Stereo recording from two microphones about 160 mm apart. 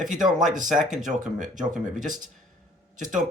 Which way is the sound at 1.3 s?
55° right (ahead or behind).